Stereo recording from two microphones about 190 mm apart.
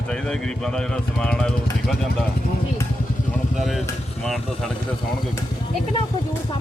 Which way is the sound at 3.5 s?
Centre (ahead or behind).